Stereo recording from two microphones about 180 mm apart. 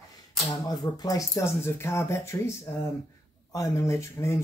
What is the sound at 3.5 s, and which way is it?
Speech, 15° left (ahead or behind).